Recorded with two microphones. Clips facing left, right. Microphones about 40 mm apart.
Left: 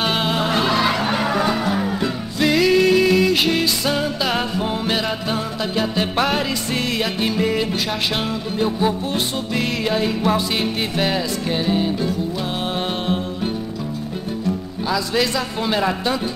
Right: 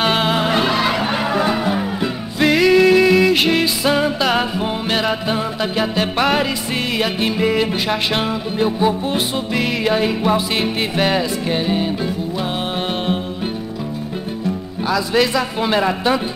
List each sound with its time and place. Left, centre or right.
0.0 s music: centre
14.9 s music: centre